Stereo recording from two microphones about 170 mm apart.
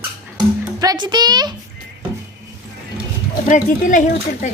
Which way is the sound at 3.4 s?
50° left (ahead or behind).